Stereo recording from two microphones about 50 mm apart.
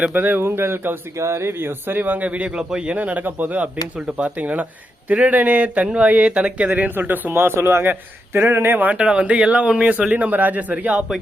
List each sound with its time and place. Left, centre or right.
0.1 s speech: right
0.4 s a man's voice: right
1.1 s a man's voice: right
2.6 s speech: centre; by 7.3 s right
7.3 s a man's voice: right
8.9 s speech: right